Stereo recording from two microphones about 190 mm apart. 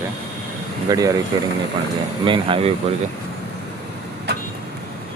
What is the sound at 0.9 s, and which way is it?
Speech, 20° right (ahead or behind).